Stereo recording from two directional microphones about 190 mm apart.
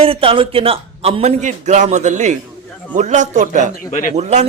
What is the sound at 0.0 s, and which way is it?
A woman's voice, 30° right (ahead or behind).